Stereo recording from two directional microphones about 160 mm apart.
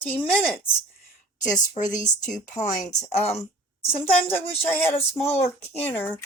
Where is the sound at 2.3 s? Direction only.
15° left (ahead or behind).